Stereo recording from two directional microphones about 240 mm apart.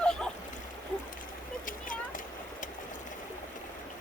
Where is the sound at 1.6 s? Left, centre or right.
Left.